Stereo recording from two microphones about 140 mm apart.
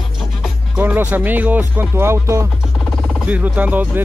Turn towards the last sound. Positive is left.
turn(degrees=-10)  # may be behind; listen again after turning